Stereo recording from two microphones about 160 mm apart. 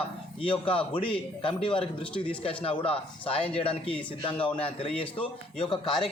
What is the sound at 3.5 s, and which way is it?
Speech, 35° left (ahead or behind).